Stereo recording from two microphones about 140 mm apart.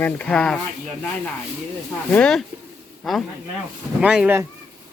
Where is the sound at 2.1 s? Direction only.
5° left (ahead or behind).